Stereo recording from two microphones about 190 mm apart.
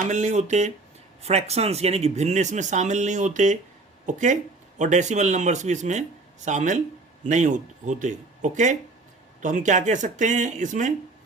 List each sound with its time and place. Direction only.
0.0 s speech: 40° right (ahead or behind)